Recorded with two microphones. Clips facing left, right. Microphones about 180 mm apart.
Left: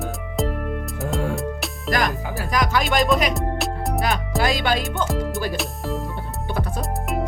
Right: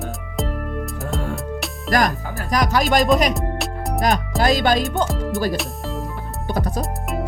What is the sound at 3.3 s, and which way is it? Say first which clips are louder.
Music: left 1 dB; centre (ahead or behind).